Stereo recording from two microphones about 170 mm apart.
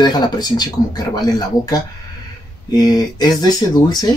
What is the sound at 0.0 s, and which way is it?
Speech, 25° left (ahead or behind).